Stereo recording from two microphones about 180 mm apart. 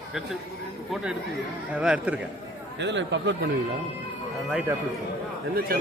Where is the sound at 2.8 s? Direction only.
80° right.